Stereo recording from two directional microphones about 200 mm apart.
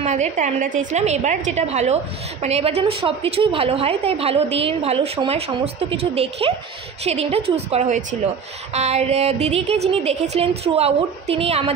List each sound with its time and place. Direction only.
0.0 s a woman's voice: 35° right (ahead or behind)